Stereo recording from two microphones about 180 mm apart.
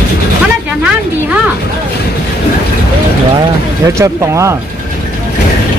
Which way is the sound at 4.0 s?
15° right (ahead or behind).